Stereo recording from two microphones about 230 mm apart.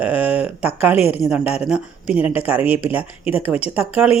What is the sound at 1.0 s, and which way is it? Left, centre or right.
Speech, left.